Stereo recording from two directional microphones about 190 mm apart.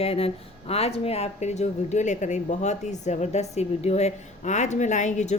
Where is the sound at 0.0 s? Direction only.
30° left (ahead or behind).